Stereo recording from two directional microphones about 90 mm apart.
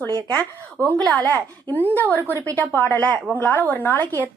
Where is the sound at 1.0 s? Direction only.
15° left (ahead or behind).